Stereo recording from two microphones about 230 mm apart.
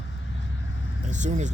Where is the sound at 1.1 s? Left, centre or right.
Right.